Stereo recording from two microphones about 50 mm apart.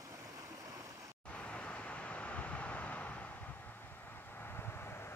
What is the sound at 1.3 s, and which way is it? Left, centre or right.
Vehicle, left.